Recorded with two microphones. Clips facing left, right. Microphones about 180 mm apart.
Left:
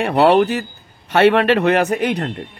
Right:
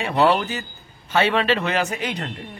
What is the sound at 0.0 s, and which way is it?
Speech, 60° left (ahead or behind).